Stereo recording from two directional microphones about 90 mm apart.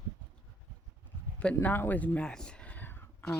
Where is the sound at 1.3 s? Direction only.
15° left (ahead or behind).